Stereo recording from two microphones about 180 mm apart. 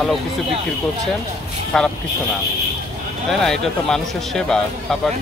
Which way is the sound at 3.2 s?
Centre (ahead or behind).